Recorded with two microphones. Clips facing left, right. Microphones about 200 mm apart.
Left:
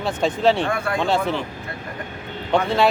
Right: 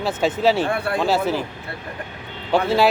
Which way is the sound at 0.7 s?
35° right (ahead or behind).